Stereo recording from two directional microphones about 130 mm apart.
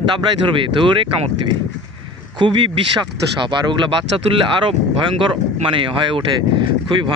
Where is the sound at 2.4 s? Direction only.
40° right (ahead or behind).